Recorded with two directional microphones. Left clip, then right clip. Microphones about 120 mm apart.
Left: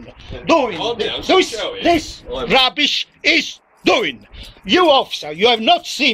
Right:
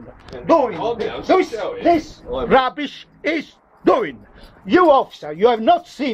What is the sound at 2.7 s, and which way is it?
Speech, 45° left (ahead or behind).